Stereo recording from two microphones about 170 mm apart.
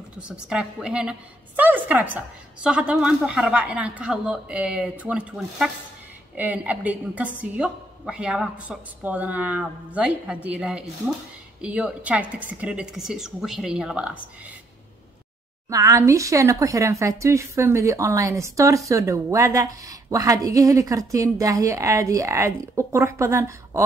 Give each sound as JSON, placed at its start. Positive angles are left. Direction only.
{"t": 0.2, "sound": "a woman's voice", "side_deg": -5}
{"t": 15.7, "sound": "a woman's voice", "side_deg": -20}